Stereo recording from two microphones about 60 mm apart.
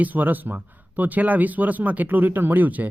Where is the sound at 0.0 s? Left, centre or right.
Right.